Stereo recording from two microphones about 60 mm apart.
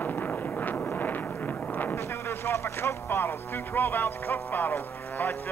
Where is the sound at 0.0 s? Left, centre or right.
Left.